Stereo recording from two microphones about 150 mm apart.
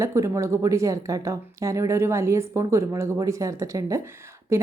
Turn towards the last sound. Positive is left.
turn(degrees=-15)  # may be behind; listen again after turning